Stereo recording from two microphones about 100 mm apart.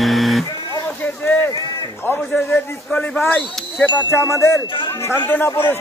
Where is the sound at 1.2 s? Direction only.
25° left (ahead or behind).